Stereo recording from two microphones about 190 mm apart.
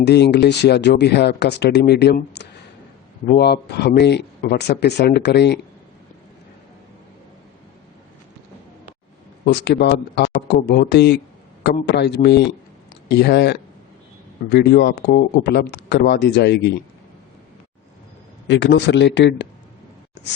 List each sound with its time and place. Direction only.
0.0 s speech: 65° left (ahead or behind)
9.5 s speech: 60° left (ahead or behind)
18.4 s speech: 70° left (ahead or behind)